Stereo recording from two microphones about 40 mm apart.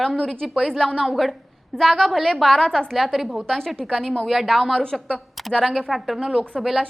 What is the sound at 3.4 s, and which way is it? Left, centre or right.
Speech, centre.